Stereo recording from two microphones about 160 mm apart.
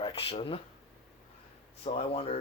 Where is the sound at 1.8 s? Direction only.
40° left (ahead or behind).